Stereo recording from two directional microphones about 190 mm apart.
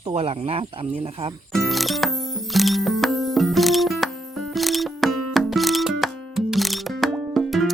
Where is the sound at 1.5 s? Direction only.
Centre (ahead or behind).